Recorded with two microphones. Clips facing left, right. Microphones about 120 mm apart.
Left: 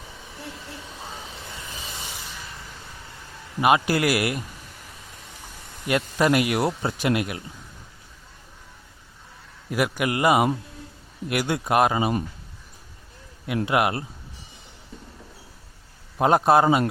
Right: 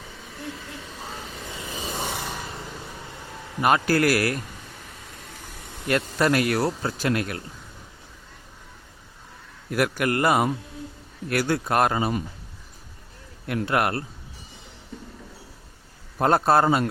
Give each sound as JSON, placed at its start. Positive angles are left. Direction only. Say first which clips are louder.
{"t": 1.5, "sound": "a sound", "louder": "right 9 dB", "side_deg": -35}
{"t": 2.0, "sound": "rub", "louder": "right 8 dB", "side_deg": -55}
{"t": 3.6, "sound": "a man's voice", "louder": "even", "side_deg": 15}
{"t": 5.9, "sound": "a man's voice", "louder": "left 1 dB", "side_deg": 5}
{"t": 6.7, "sound": "speech", "louder": "left 1 dB", "side_deg": 25}
{"t": 7.1, "sound": "a man's voice", "louder": "left 2 dB", "side_deg": 10}
{"t": 9.6, "sound": "a man's voice", "louder": "right 1 dB", "side_deg": 5}
{"t": 13.7, "sound": "a man's voice", "louder": "left 1 dB", "side_deg": 10}
{"t": 16.1, "sound": "a man's voice", "louder": "left 2 dB", "side_deg": 10}